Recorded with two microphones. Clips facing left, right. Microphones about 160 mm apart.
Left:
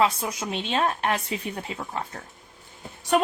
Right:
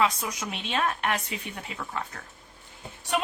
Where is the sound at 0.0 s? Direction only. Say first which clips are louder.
Left 3 dB; 30° left (ahead or behind).